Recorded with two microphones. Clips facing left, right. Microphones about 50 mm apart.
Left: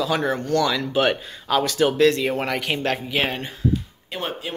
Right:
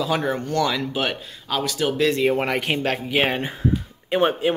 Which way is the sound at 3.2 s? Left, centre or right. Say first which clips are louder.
Right 2 dB; centre.